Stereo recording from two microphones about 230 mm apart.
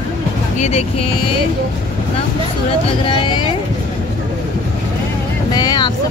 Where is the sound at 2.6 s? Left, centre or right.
Left.